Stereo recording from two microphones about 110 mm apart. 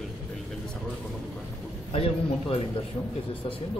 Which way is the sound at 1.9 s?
60° left (ahead or behind).